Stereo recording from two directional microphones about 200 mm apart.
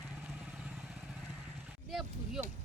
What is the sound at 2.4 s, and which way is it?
Speech, 5° right (ahead or behind).